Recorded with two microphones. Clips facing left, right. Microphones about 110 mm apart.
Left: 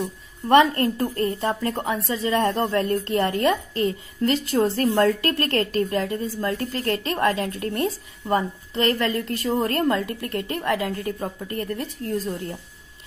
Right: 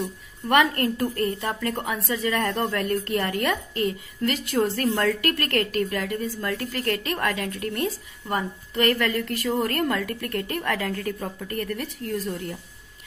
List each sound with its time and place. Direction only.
0.0 s a woman's voice: 30° left (ahead or behind)